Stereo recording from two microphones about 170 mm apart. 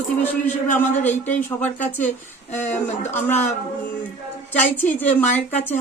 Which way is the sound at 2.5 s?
45° left (ahead or behind).